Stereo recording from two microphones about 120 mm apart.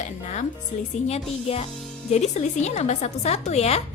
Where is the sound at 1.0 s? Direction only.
60° left (ahead or behind).